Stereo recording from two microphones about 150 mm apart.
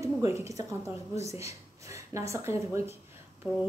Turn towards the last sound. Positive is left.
turn(degrees=-5)  # may be behind; listen again after turning